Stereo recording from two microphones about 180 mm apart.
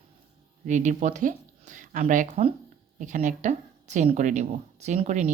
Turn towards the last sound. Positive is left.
turn(degrees=-40)  # may be behind; listen again after turning